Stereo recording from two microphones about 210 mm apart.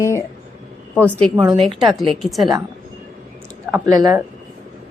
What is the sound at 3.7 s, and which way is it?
Speech, 15° right (ahead or behind).